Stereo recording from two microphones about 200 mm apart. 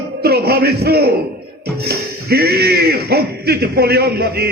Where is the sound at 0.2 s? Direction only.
50° right (ahead or behind).